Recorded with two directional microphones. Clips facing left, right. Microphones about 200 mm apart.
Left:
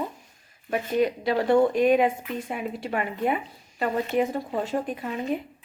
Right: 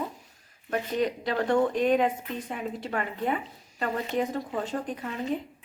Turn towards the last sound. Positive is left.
turn(degrees=10)  # may be behind; listen again after turning